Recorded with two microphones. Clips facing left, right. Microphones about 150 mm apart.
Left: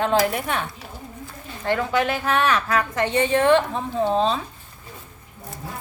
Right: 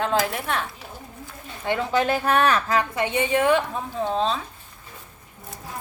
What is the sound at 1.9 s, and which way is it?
Speech, 40° right (ahead or behind).